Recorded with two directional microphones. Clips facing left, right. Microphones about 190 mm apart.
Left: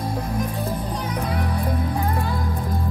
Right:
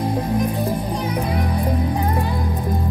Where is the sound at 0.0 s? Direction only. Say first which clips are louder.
Right 5 dB; 20° right (ahead or behind).